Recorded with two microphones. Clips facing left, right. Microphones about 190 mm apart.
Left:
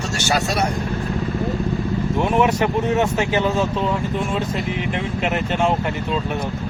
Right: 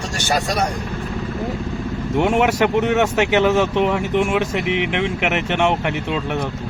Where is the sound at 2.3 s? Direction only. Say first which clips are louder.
Right 2 dB; 80° right.